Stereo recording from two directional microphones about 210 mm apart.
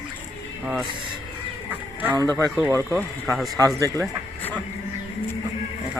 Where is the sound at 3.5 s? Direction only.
15° right (ahead or behind).